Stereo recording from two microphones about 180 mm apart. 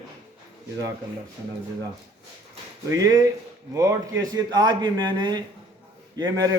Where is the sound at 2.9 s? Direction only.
15° right (ahead or behind).